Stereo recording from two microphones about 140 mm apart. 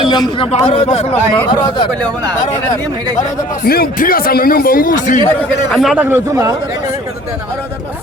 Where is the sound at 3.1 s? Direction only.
75° left (ahead or behind).